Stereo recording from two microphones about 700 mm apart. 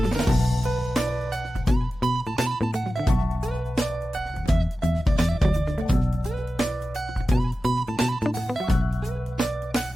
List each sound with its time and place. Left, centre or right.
0.0 s music: centre